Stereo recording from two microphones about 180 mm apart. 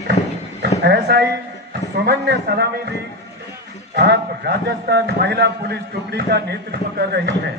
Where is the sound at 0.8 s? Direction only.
65° right (ahead or behind).